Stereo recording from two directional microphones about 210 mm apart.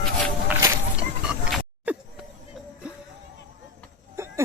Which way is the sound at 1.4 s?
5° right (ahead or behind).